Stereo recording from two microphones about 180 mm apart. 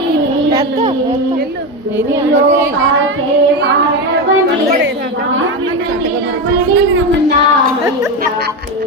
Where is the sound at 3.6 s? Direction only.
70° right (ahead or behind).